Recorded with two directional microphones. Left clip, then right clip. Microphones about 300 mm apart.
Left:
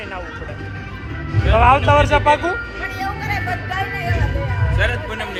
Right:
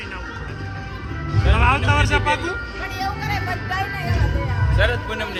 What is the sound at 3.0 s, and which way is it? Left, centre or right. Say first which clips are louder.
Music: left 1 dB; right.